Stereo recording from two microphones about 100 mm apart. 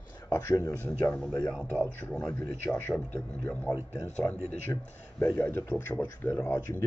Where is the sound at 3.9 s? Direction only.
20° left (ahead or behind).